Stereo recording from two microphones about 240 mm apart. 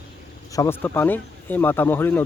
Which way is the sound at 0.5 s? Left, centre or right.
Centre.